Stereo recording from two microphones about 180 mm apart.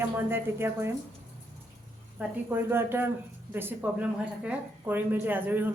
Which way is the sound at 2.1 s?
10° right (ahead or behind).